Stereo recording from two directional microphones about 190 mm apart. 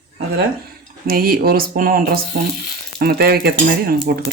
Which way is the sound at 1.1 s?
50° right (ahead or behind).